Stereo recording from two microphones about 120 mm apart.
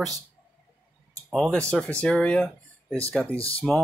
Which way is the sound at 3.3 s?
50° left (ahead or behind).